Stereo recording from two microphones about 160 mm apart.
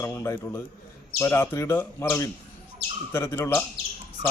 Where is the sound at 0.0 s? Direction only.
15° left (ahead or behind).